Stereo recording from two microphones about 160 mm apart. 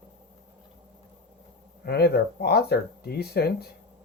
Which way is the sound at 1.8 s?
85° left.